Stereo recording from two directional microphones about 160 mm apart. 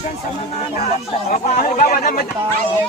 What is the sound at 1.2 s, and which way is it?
Speech, 60° left (ahead or behind).